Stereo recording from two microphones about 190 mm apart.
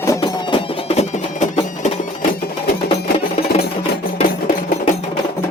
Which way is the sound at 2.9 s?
30° left (ahead or behind).